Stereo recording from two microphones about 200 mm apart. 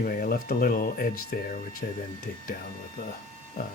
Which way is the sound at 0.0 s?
45° left (ahead or behind).